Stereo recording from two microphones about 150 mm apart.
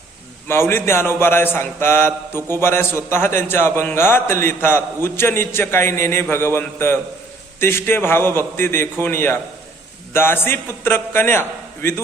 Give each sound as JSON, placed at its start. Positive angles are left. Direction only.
{"t": 0.4, "sound": "a man's voice", "side_deg": 15}